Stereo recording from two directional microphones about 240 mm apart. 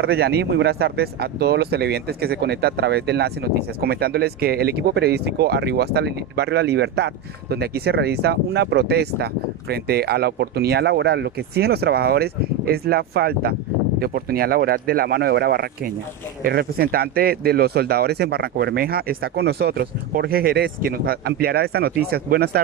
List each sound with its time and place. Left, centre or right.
0.0 s speech: right